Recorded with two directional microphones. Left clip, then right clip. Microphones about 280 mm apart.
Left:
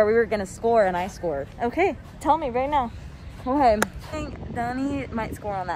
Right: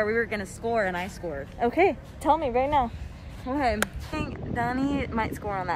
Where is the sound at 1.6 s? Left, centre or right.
Centre.